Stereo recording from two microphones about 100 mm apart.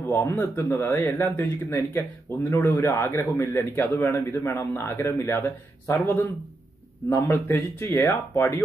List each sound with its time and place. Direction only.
0.1 s speech: 25° left (ahead or behind)
5.4 s speech: 20° left (ahead or behind)
7.2 s speech: 25° left (ahead or behind)